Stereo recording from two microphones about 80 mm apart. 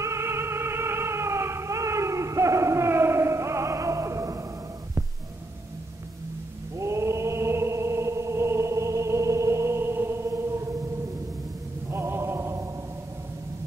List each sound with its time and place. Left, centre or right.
0.0 s music: right
6.8 s chant: right
11.9 s chant: right